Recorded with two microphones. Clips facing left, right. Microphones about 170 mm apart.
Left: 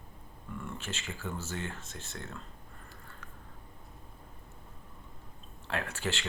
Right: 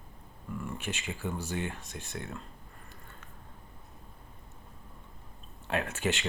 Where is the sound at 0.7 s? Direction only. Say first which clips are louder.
Right 3 dB; 15° right (ahead or behind).